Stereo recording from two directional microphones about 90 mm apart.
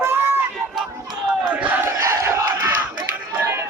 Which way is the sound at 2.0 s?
30° right (ahead or behind).